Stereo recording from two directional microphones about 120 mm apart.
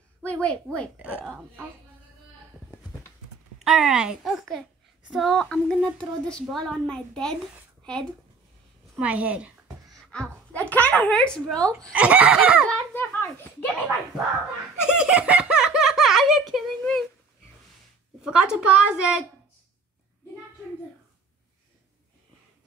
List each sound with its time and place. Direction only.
0.2 s a woman's voice: 10° left (ahead or behind)
3.5 s speech: 5° right (ahead or behind)
9.0 s a sound: 10° right (ahead or behind)
10.1 s speech: 10° left (ahead or behind)
11.9 s speech: 10° right (ahead or behind)
12.6 s a sound: 15° left (ahead or behind)
15.0 s giggle: 10° right (ahead or behind)
18.2 s speech: 5° right (ahead or behind)